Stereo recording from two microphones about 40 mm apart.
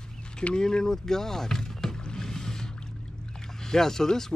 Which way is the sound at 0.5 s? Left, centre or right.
Centre.